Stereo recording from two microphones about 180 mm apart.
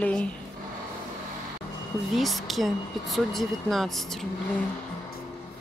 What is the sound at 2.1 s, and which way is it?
Speech, centre (ahead or behind).